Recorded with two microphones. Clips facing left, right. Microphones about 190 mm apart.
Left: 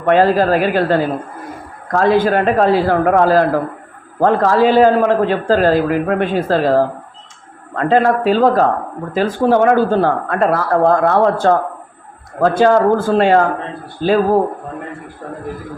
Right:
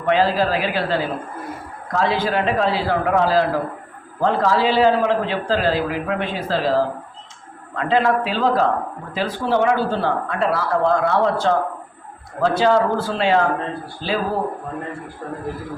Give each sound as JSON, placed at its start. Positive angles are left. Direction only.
{"t": 0.0, "sound": "a man's voice", "side_deg": 55}